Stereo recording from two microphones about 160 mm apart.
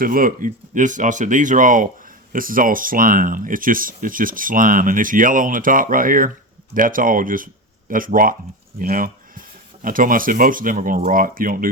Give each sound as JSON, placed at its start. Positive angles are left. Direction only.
{"t": 0.0, "sound": "speech", "side_deg": -60}